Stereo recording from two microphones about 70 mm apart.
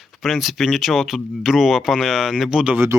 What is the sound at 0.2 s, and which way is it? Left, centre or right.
Speech, centre.